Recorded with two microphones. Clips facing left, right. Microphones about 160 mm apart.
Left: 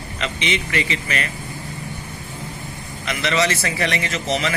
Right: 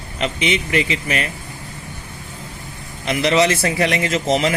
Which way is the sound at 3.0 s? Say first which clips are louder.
Right 5 dB; 35° right (ahead or behind).